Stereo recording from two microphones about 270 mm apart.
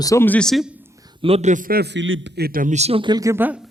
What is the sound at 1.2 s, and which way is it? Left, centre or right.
A man's voice, right.